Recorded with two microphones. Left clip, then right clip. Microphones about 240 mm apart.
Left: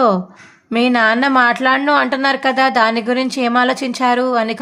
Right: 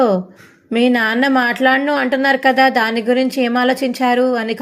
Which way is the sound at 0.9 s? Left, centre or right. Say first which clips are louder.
Left 2 dB; centre.